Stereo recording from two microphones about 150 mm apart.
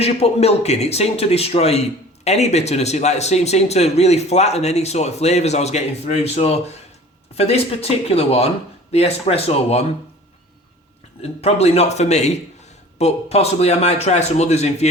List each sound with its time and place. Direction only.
0.0 s speech: 45° left (ahead or behind)
11.2 s speech: 45° left (ahead or behind)